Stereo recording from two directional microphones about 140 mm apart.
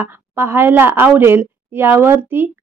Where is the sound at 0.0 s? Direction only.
15° right (ahead or behind).